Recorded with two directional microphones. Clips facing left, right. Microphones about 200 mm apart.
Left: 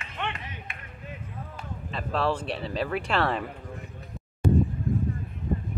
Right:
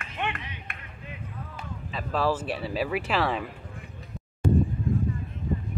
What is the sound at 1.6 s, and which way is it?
Speech, centre (ahead or behind).